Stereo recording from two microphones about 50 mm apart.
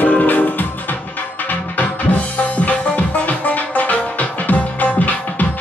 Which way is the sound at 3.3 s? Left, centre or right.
Left.